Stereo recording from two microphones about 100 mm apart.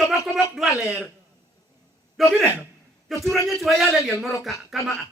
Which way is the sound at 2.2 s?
Centre (ahead or behind).